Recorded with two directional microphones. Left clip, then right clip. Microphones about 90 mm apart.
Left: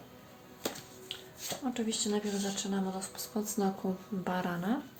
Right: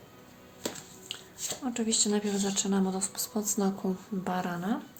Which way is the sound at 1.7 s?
90° right.